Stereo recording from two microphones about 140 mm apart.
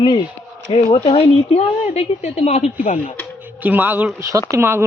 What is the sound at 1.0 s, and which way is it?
A woman's voice, 50° left (ahead or behind).